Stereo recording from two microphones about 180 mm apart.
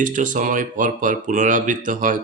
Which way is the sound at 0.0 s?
45° right (ahead or behind).